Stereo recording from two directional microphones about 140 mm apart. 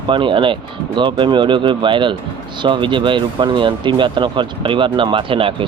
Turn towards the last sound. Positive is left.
turn(degrees=-40)  # may be behind; listen again after turning